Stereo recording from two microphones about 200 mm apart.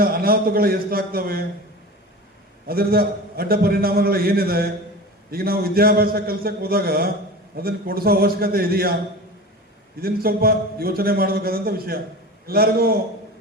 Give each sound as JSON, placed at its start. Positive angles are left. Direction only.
{"t": 0.0, "sound": "a man's voice", "side_deg": -50}
{"t": 2.6, "sound": "a man's voice", "side_deg": -50}
{"t": 10.0, "sound": "a man's voice", "side_deg": -50}